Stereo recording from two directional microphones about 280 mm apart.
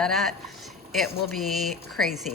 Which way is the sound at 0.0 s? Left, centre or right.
Centre.